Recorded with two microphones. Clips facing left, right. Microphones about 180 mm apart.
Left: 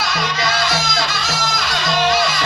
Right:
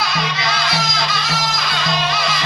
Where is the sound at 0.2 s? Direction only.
45° left (ahead or behind).